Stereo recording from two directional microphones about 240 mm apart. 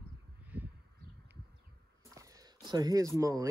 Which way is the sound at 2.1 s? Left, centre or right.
Centre.